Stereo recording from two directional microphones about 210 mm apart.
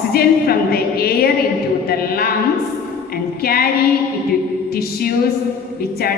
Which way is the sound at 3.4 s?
45° left (ahead or behind).